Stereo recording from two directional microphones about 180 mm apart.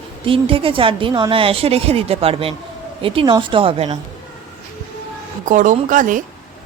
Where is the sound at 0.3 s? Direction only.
30° right (ahead or behind).